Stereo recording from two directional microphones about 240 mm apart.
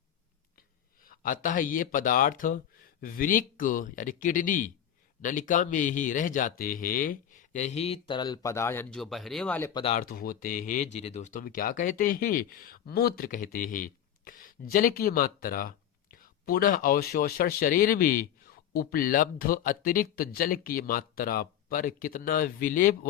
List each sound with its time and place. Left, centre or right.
1.0 s speech: left; by 9.8 s centre
9.8 s speech: left